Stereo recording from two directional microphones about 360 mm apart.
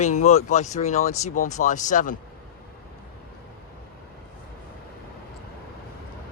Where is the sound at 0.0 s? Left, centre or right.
Centre.